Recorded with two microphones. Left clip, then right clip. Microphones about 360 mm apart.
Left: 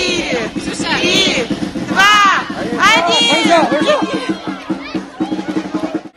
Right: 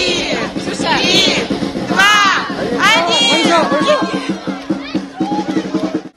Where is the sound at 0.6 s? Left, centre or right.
Right.